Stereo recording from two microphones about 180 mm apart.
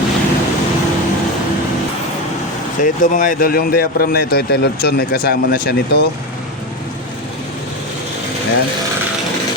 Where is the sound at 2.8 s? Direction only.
45° left (ahead or behind).